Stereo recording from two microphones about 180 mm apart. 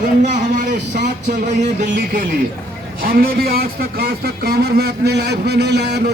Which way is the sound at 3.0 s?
55° right (ahead or behind).